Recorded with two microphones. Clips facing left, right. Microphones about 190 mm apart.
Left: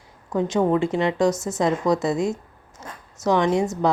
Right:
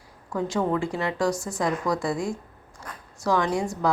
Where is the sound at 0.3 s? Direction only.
20° left (ahead or behind).